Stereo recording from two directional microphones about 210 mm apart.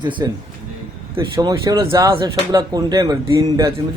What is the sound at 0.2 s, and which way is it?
Speech, 15° right (ahead or behind).